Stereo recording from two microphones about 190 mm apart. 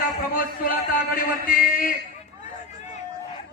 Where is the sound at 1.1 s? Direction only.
50° left (ahead or behind).